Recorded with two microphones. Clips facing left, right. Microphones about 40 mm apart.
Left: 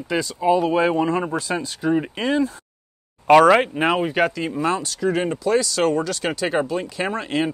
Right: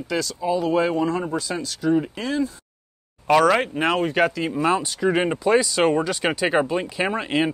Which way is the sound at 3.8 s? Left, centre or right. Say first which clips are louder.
Left 1 dB; centre.